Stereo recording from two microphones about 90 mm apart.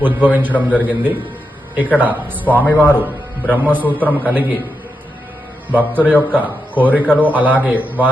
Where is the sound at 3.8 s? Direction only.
20° left (ahead or behind).